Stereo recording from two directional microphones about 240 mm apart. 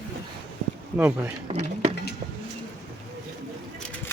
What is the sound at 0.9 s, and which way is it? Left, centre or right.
Speech, centre.